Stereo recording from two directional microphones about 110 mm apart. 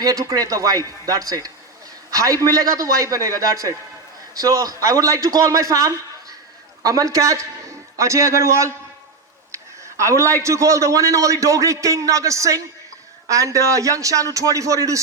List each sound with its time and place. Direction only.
0.0 s a man's voice: 30° right (ahead or behind)
10.0 s a man's voice: 30° right (ahead or behind)